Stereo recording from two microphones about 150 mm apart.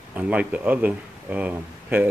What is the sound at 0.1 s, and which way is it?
Speech, 10° right (ahead or behind).